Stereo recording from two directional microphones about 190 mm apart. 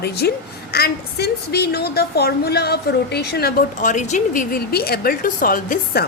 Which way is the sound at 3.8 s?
40° left (ahead or behind).